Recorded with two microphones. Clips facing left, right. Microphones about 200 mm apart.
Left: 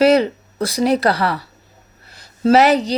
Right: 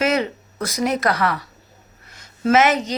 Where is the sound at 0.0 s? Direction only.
35° left (ahead or behind).